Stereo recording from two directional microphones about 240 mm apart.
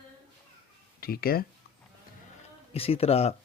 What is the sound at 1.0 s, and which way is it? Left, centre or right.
Speech, left.